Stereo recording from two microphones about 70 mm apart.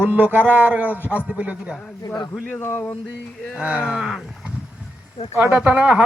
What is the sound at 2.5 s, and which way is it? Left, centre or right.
Speech, left.